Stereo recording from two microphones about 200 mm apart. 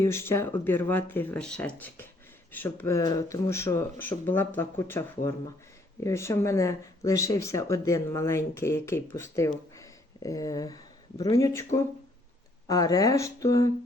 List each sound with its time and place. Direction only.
0.0 s speech: 15° left (ahead or behind)